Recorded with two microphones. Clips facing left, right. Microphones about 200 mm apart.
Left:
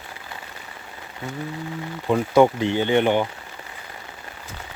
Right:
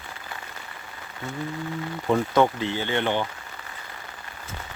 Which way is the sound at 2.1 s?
15° left (ahead or behind).